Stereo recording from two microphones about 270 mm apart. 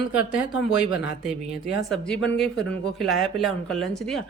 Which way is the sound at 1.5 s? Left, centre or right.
Centre.